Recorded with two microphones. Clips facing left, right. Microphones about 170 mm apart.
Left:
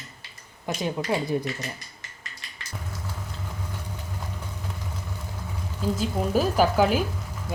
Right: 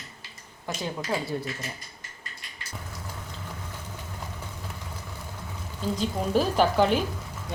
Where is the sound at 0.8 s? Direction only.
20° left (ahead or behind).